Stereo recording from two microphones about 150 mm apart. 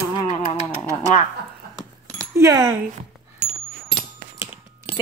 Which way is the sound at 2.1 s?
20° right (ahead or behind).